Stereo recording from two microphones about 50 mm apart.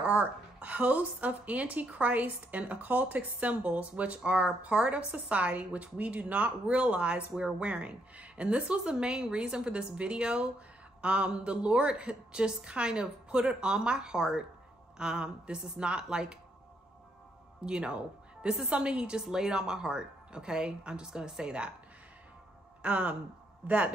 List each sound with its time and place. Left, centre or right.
0.0 s a woman's voice: right
17.6 s a woman's voice: centre
22.8 s speech: right